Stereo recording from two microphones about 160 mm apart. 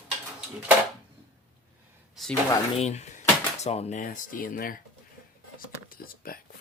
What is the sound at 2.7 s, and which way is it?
Speech, 45° left (ahead or behind).